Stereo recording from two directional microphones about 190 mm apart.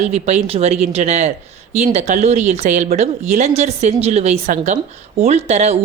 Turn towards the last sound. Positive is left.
turn(degrees=-35)  # may be behind; listen again after turning